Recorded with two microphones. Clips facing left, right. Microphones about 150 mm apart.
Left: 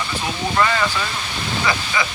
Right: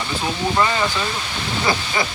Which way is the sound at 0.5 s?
20° right (ahead or behind).